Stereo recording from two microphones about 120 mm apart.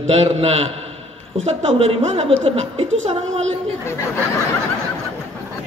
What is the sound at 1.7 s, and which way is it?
Speech, 55° right (ahead or behind).